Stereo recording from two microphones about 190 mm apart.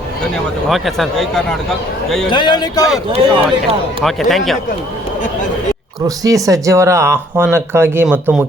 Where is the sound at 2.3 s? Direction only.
25° left (ahead or behind).